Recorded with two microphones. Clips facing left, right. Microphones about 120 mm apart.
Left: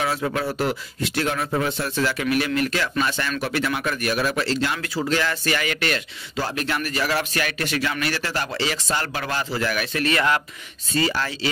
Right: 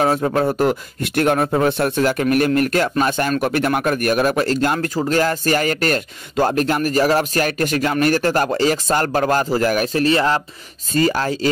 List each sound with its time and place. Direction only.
0.0 s speech: 40° right (ahead or behind)
10.9 s speech: 45° right (ahead or behind)